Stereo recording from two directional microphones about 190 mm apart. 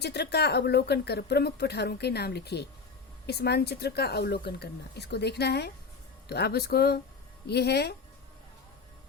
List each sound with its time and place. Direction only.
0.0 s speech: 60° left (ahead or behind)